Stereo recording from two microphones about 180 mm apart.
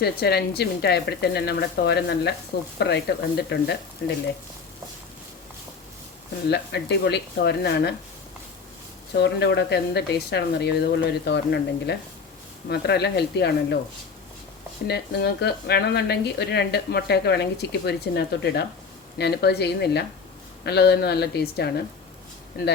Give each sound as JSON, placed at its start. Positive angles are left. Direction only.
{"t": 0.0, "sound": "a woman's voice", "side_deg": 60}
{"t": 6.5, "sound": "speech", "side_deg": 70}
{"t": 9.1, "sound": "a woman's voice", "side_deg": 70}
{"t": 14.8, "sound": "a woman's voice", "side_deg": 65}